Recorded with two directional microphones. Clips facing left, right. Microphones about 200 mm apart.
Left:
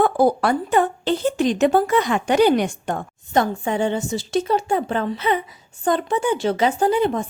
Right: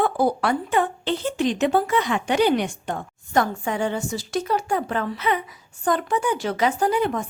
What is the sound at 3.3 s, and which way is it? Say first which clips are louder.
A woman's voice: left 2 dB; 25° left (ahead or behind).